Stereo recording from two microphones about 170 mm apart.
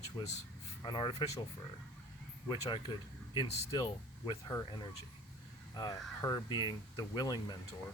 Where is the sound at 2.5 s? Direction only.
25° left (ahead or behind).